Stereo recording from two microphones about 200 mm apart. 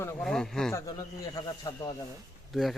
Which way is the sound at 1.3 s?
20° left (ahead or behind).